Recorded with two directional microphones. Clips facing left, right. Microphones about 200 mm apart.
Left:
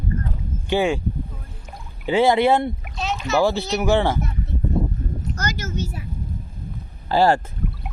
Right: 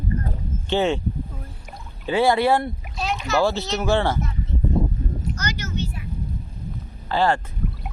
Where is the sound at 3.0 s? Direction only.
Centre (ahead or behind).